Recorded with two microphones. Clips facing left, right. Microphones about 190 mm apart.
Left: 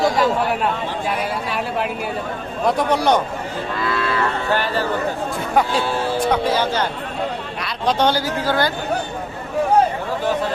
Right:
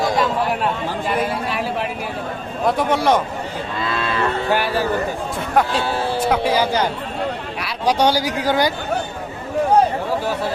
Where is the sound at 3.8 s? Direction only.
25° right (ahead or behind).